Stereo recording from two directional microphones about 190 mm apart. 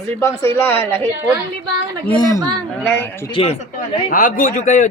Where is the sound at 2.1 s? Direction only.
20° left (ahead or behind).